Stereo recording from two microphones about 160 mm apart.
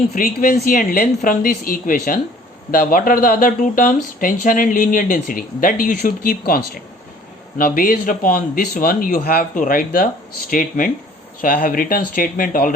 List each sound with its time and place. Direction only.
0.2 s speech: 65° left (ahead or behind)
7.6 s speech: 65° left (ahead or behind)